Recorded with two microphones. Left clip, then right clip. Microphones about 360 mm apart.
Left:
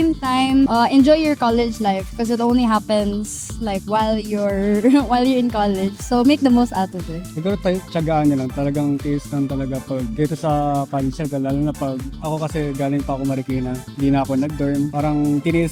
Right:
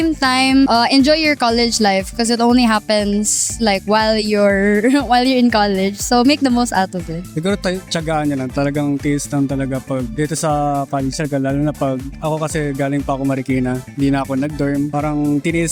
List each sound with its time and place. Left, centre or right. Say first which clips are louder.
0.0 s speech: right 3 dB; right